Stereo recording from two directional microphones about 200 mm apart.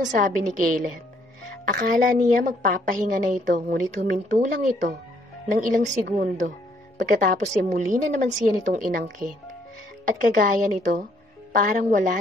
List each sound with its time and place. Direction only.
0.1 s a woman's voice: 40° right (ahead or behind)